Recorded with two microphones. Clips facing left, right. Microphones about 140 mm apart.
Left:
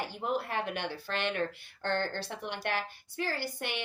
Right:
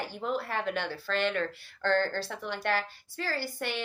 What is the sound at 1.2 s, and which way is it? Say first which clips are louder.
Speech: even; 20° left (ahead or behind).